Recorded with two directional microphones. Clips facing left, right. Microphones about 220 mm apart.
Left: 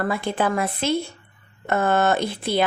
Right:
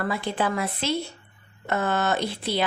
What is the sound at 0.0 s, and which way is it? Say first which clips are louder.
Speech: left 3 dB; 50° left (ahead or behind).